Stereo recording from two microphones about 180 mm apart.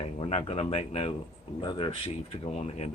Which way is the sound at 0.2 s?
35° left (ahead or behind).